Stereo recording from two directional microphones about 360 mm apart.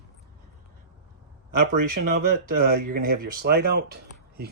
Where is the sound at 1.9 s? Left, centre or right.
Right.